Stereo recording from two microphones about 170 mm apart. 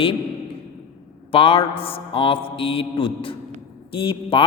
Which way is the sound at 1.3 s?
35° left (ahead or behind).